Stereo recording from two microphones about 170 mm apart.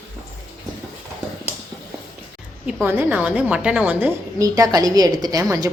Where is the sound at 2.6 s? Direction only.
10° right (ahead or behind).